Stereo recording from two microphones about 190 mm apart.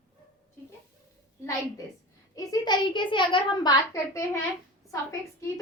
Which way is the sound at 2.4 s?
20° left (ahead or behind).